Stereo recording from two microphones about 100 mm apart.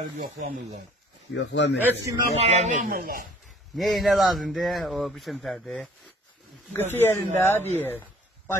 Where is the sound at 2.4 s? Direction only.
90° right.